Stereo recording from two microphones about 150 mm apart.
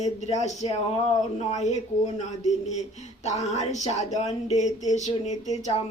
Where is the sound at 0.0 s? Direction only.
50° left (ahead or behind).